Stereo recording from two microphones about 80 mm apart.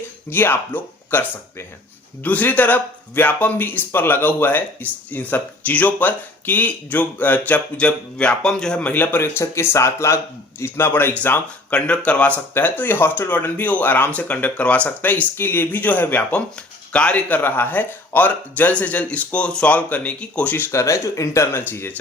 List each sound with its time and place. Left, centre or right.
0.3 s speech: left; by 8.9 s centre
8.9 s speech: left
11.2 s speech: centre
20.7 s speech: left
21.6 s speech: left